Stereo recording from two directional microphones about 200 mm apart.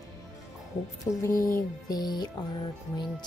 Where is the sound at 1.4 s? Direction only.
15° left (ahead or behind).